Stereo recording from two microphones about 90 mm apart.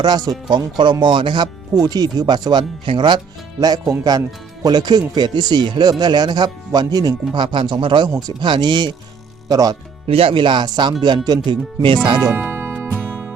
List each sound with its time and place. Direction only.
0.0 s speech: 50° right (ahead or behind); by 3.2 s 65° right (ahead or behind)
3.6 s speech: 45° right (ahead or behind)
10.1 s speech: 90° right; by 11.9 s 65° right (ahead or behind)
12.3 s music: 25° right (ahead or behind)